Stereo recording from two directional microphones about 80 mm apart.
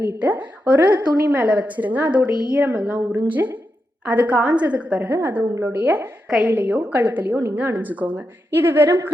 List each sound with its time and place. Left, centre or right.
0.2 s a woman's voice: centre
5.5 s a woman's voice: right
8.5 s a woman's voice: right